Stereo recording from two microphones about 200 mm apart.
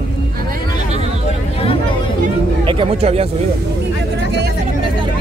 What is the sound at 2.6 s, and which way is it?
Speech, 25° right (ahead or behind).